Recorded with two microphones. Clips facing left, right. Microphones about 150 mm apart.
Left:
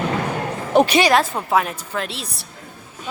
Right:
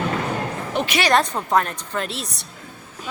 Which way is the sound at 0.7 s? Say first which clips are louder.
Left 11 dB; 40° left (ahead or behind).